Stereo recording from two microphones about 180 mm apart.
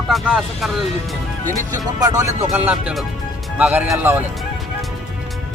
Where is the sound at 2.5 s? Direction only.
5° right (ahead or behind).